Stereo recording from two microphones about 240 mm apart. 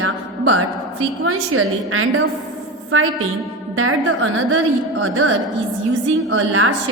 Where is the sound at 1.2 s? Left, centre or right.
Right.